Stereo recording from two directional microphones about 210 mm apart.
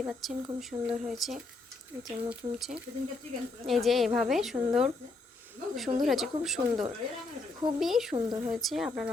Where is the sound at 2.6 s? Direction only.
5° right (ahead or behind).